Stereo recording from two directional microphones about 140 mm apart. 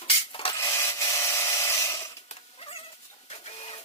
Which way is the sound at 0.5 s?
20° left (ahead or behind).